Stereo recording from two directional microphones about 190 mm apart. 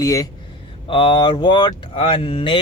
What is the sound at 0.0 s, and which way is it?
Speech, 20° left (ahead or behind).